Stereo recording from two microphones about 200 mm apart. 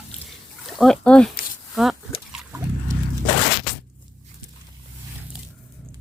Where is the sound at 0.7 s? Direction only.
Centre (ahead or behind).